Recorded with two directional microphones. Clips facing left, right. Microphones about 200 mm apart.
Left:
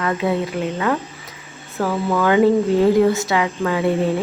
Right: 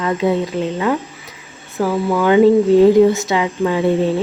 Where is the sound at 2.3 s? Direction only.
20° right (ahead or behind).